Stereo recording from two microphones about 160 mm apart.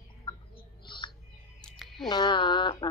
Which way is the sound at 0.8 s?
30° left (ahead or behind).